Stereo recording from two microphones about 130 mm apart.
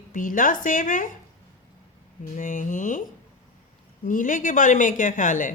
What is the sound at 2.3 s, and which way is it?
Speech, 90° left.